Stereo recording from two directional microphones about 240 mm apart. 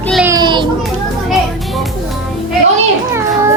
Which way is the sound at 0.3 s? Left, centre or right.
Centre.